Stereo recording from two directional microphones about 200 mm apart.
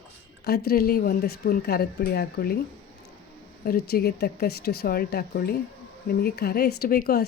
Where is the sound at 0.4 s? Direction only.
50° left (ahead or behind).